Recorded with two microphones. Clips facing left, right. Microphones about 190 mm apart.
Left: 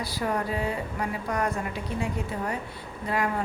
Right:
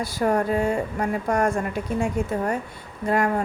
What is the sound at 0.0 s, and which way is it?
A woman's voice, 45° right (ahead or behind).